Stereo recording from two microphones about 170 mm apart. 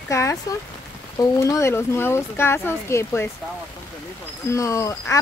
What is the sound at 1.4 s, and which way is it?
Speech, 15° left (ahead or behind).